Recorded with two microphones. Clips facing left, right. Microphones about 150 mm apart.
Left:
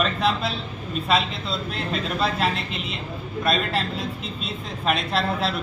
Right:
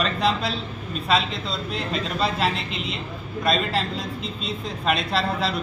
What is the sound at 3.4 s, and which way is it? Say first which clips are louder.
A man's voice: right 1 dB; 5° left (ahead or behind).